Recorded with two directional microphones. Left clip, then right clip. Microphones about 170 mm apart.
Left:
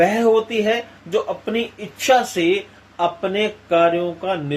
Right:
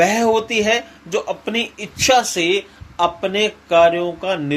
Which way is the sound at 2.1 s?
30° right (ahead or behind).